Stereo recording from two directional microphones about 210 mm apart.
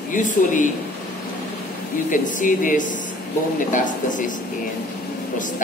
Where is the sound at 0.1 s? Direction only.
40° left (ahead or behind).